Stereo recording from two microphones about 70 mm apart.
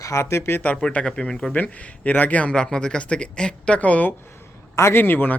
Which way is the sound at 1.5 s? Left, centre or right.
Left.